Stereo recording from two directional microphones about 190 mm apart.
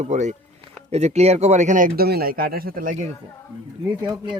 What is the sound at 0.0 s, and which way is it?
Speech, 40° right (ahead or behind).